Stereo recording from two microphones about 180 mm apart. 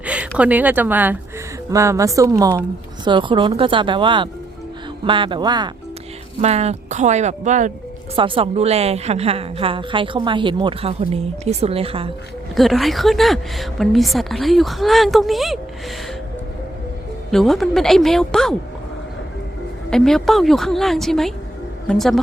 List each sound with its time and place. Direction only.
0.0 s a woman's voice: 5° right (ahead or behind); by 5.7 s 25° right (ahead or behind)
6.4 s a woman's voice: 35° right (ahead or behind)
8.1 s a woman's voice: 30° right (ahead or behind)
12.5 s a woman's voice: centre (ahead or behind)
17.3 s a woman's voice: centre (ahead or behind)
19.9 s a woman's voice: 5° left (ahead or behind)